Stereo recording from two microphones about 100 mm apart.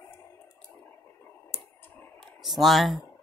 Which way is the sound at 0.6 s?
20° left (ahead or behind).